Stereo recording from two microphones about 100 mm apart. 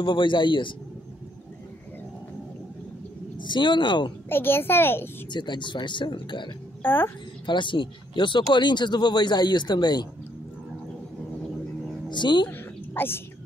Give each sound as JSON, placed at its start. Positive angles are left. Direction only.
{"t": 0.0, "sound": "speech", "side_deg": 55}
{"t": 3.3, "sound": "speech", "side_deg": 50}
{"t": 4.3, "sound": "a child's voice", "side_deg": 20}
{"t": 5.3, "sound": "speech", "side_deg": 50}
{"t": 6.8, "sound": "a woman's voice", "side_deg": 20}
{"t": 7.4, "sound": "speech", "side_deg": 55}
{"t": 12.1, "sound": "speech", "side_deg": 50}
{"t": 12.4, "sound": "a sound", "side_deg": 20}